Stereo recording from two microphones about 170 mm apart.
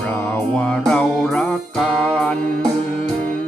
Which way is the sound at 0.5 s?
5° left (ahead or behind).